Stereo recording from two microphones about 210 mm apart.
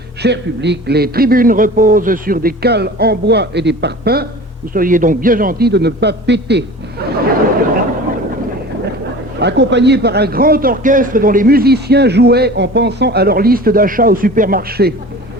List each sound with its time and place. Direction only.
0.2 s a man's voice: 55° right (ahead or behind)
9.4 s a man's voice: 55° right (ahead or behind)